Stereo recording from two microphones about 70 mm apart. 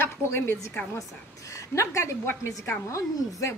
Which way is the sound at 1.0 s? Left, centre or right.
Left.